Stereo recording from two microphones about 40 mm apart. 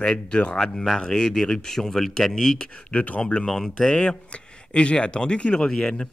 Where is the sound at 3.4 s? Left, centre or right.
Centre.